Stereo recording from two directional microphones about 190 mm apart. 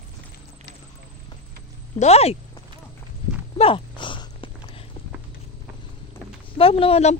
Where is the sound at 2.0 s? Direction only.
35° left (ahead or behind).